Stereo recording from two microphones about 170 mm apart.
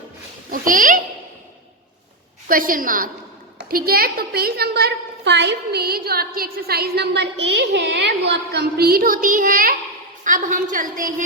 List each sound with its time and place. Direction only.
0.5 s a woman's voice: 55° right (ahead or behind)
2.5 s a woman's voice: 55° right (ahead or behind)